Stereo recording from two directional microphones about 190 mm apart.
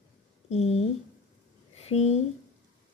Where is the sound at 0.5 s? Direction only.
35° left (ahead or behind).